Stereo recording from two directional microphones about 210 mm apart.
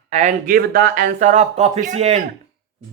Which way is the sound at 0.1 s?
35° right (ahead or behind).